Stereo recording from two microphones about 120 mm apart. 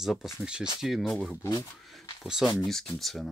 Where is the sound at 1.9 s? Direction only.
5° right (ahead or behind).